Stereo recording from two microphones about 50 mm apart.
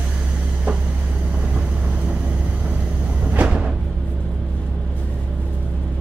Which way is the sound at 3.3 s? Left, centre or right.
Right.